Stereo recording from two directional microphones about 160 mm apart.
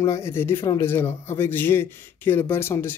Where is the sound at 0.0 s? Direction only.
20° left (ahead or behind).